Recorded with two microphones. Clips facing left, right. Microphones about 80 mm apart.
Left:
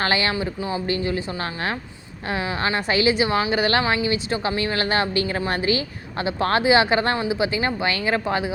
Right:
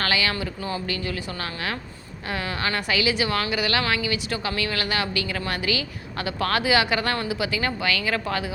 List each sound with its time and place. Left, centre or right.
0.0 s a woman's voice: left